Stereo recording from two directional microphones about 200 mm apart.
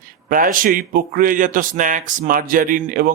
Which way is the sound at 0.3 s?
45° right (ahead or behind).